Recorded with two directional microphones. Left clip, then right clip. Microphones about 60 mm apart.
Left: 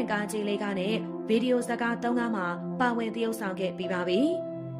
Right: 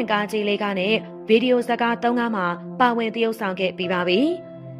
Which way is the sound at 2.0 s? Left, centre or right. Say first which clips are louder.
Right 7 dB; right.